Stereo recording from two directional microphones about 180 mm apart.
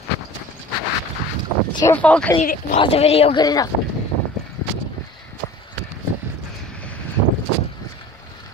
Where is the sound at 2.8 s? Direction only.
35° left (ahead or behind).